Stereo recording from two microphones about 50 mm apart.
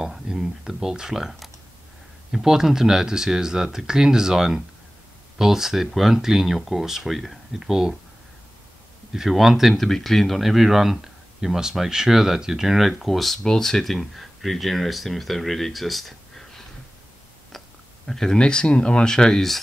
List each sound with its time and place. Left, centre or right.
0.0 s speech: centre
9.1 s speech: centre
18.0 s speech: centre